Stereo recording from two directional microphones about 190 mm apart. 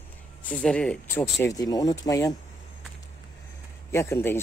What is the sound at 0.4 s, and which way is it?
Speech, 5° left (ahead or behind).